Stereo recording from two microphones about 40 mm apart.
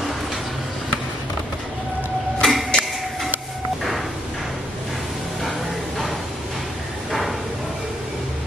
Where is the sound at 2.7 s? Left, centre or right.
Centre.